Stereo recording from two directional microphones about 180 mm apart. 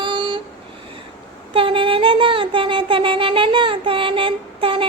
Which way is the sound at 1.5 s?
30° right (ahead or behind).